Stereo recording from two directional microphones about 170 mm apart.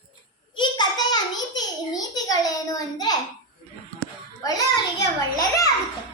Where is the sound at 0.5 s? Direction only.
25° left (ahead or behind).